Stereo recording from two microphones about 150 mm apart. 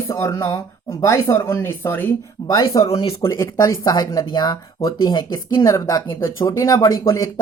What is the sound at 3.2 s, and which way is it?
Speech, 20° left (ahead or behind).